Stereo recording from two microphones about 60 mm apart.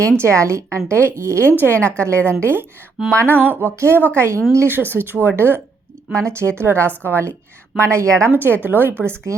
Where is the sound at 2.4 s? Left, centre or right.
Right.